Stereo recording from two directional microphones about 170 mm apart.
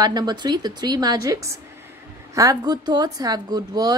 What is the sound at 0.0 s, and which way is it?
A woman's voice, 25° right (ahead or behind).